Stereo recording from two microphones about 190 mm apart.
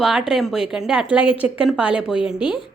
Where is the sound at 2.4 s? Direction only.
25° left (ahead or behind).